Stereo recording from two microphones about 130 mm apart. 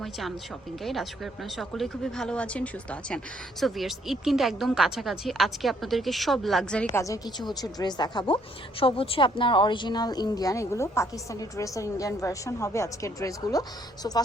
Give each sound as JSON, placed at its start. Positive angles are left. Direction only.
{"t": 0.0, "sound": "speech", "side_deg": 0}
{"t": 3.6, "sound": "speech", "side_deg": 0}
{"t": 6.9, "sound": "speech", "side_deg": 25}
{"t": 8.8, "sound": "speech", "side_deg": 45}